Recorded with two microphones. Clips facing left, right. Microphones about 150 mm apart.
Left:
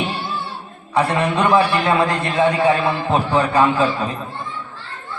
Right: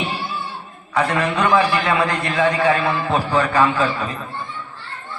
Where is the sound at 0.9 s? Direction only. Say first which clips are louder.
Left 2 dB; 30° left (ahead or behind).